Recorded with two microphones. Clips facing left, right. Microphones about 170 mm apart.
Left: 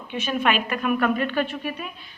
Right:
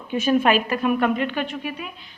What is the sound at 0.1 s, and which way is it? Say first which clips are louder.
A woman's voice: right 5 dB; 40° right (ahead or behind).